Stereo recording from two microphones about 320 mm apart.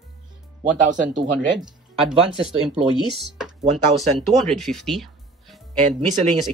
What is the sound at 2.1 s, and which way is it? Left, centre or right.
Speech, centre.